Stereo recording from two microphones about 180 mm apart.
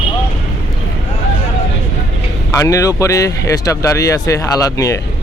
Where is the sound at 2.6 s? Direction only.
15° left (ahead or behind).